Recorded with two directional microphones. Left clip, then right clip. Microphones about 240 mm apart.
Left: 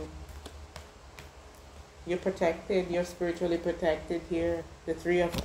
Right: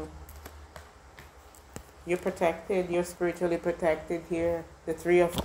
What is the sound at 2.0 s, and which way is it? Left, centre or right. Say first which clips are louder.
Speech: right 1 dB; right.